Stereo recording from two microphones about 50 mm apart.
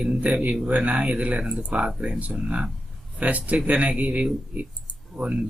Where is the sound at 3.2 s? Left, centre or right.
Right.